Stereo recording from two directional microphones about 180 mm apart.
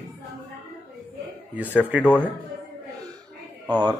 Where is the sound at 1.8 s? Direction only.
5° right (ahead or behind).